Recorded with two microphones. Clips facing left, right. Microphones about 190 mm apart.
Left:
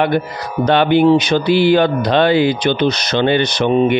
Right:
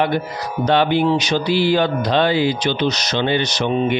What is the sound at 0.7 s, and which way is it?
Mantra, 60° left (ahead or behind).